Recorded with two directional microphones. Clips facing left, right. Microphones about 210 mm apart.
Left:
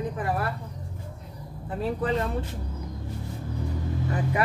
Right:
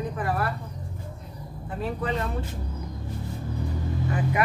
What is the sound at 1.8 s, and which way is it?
Speech, 35° left (ahead or behind).